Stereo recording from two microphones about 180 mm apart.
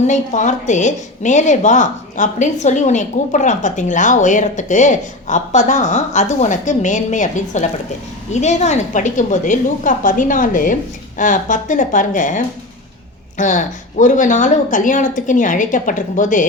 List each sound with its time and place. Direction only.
0.1 s a woman's voice: 40° left (ahead or behind)